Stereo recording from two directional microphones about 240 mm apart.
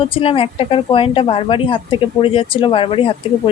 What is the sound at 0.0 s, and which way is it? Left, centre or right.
Speech, left.